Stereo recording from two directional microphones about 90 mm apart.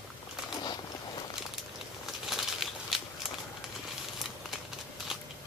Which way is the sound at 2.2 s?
5° right (ahead or behind).